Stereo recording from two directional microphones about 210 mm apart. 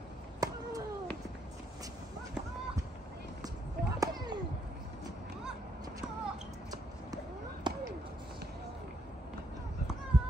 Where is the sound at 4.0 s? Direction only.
20° right (ahead or behind).